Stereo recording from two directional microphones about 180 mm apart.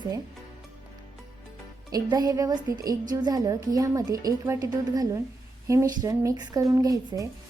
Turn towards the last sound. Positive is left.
turn(degrees=-20)  # may be behind; listen again after turning